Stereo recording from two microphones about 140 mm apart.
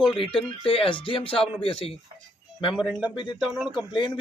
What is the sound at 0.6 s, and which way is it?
Speech, 40° left (ahead or behind).